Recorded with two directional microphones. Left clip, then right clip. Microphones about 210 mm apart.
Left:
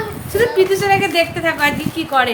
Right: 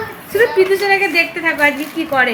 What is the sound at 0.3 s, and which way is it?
A woman's voice, centre (ahead or behind).